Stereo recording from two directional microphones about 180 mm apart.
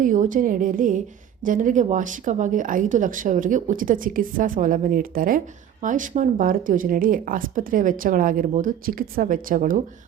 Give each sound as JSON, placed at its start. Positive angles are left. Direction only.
{"t": 0.0, "sound": "speech", "side_deg": -45}